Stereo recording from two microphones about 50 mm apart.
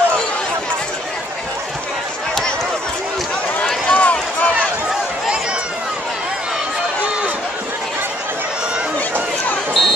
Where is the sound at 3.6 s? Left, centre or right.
Left.